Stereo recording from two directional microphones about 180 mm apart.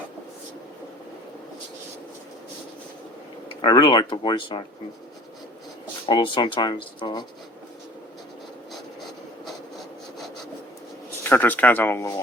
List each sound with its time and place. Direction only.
3.6 s speech: 25° left (ahead or behind)
6.1 s speech: 25° left (ahead or behind)
11.2 s speech: 10° left (ahead or behind)